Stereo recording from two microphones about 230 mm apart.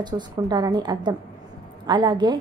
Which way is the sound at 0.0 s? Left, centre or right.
Centre.